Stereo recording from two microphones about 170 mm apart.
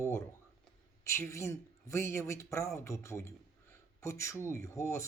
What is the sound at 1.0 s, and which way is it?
Speech, 15° left (ahead or behind).